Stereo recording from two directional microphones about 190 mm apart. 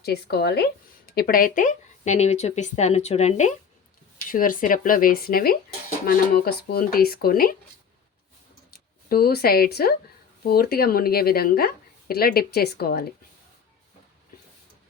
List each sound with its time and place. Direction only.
0.0 s a woman's voice: 55° left (ahead or behind)
9.0 s a woman's voice: 55° left (ahead or behind)